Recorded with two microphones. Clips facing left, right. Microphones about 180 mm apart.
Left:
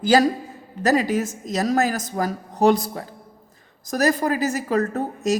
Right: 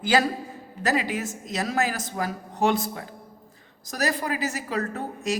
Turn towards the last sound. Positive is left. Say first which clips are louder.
# left 6 dB
turn(degrees=45)  # may be behind; listen again after turning